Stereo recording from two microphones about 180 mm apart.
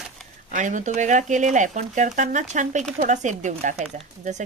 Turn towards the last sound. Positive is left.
turn(degrees=-40)  # may be behind; listen again after turning